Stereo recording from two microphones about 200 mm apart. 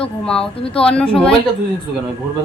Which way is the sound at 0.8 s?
5° left (ahead or behind).